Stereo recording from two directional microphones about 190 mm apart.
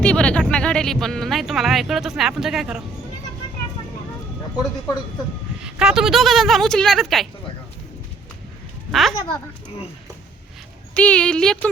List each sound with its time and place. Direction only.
0.0 s speech: 5° left (ahead or behind)
5.5 s speech: 5° right (ahead or behind)
8.9 s speech: centre (ahead or behind)
10.9 s speech: 5° left (ahead or behind)